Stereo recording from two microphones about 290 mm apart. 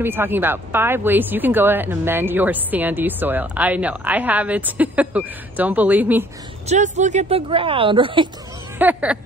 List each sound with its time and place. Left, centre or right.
0.0 s speech: centre
6.7 s speech: right
8.7 s speech: centre